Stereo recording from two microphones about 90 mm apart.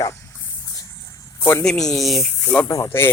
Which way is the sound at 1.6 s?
5° left (ahead or behind).